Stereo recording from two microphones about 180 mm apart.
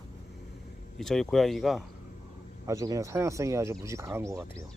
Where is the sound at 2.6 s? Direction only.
20° right (ahead or behind).